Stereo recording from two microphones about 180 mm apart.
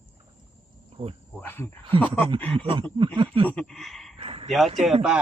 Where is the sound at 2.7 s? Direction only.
30° right (ahead or behind).